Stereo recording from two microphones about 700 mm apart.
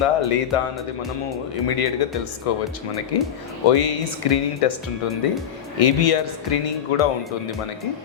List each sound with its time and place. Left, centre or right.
0.0 s speech: left
1.6 s speech: left